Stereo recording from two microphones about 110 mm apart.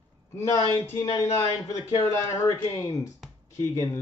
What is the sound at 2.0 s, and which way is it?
Speech, 25° left (ahead or behind).